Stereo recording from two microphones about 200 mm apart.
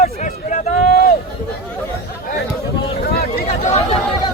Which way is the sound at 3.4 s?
35° left (ahead or behind).